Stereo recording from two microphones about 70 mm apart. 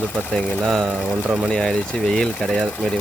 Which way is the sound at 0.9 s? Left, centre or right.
Centre.